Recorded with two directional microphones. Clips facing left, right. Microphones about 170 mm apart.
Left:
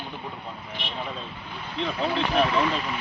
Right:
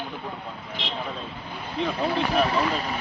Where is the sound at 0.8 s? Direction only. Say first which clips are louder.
Right 4 dB; 90° right.